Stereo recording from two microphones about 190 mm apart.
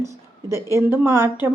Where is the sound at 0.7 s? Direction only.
10° right (ahead or behind).